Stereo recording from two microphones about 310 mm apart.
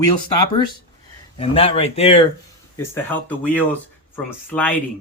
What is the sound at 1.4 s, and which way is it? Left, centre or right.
Speech, centre.